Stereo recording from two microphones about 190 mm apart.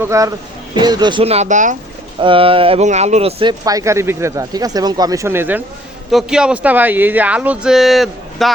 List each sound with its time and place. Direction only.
0.1 s speech: 15° right (ahead or behind); by 1.7 s 40° right (ahead or behind)
2.2 s speech: 30° right (ahead or behind)
3.6 s speech: 20° right (ahead or behind); by 8.5 s centre (ahead or behind)